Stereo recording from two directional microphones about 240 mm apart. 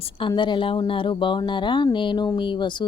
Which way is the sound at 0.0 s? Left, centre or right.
Left.